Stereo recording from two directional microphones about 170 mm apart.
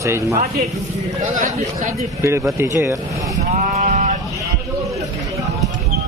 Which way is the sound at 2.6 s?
15° right (ahead or behind).